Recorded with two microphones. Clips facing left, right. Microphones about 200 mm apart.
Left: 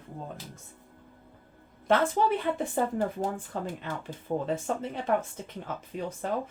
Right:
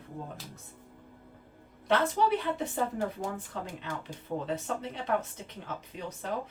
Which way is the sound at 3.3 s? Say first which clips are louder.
Left 4 dB; 50° left (ahead or behind).